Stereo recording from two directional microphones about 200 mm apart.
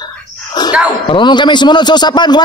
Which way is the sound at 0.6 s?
20° left (ahead or behind).